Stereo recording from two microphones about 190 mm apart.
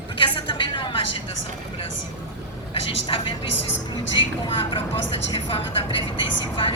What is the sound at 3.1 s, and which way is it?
Speech, 30° left (ahead or behind).